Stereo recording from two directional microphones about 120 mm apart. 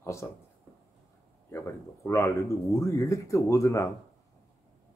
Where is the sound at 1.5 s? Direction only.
25° left (ahead or behind).